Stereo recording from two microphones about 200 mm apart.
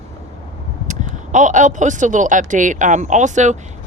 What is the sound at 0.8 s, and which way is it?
Speech, 40° right (ahead or behind).